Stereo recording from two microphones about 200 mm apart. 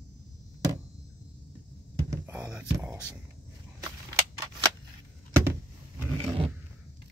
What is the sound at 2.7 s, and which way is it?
Speech, 15° right (ahead or behind).